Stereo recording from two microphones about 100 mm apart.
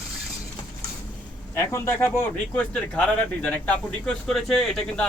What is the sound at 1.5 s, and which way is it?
Speech, 25° left (ahead or behind).